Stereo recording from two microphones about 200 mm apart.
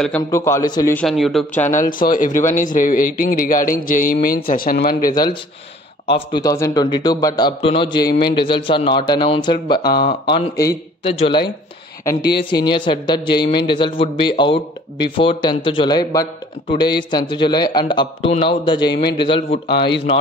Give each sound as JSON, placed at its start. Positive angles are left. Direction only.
{"t": 0.3, "sound": "a man's voice", "side_deg": 15}
{"t": 0.9, "sound": "speech", "side_deg": 0}
{"t": 1.8, "sound": "speech", "side_deg": 45}
{"t": 5.1, "sound": "speech", "side_deg": 20}
{"t": 9.9, "sound": "speech", "side_deg": 50}
{"t": 10.3, "sound": "a man's voice", "side_deg": 20}
{"t": 11.1, "sound": "speech", "side_deg": 25}
{"t": 12.0, "sound": "a man's voice", "side_deg": 15}
{"t": 16.6, "sound": "speech", "side_deg": 55}
{"t": 17.1, "sound": "speech", "side_deg": 20}
{"t": 19.7, "sound": "speech", "side_deg": 55}